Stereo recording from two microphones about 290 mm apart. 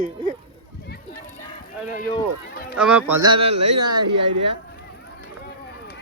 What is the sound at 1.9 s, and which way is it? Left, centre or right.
Speech, left.